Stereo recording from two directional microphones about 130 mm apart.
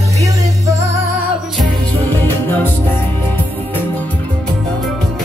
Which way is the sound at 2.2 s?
15° left (ahead or behind).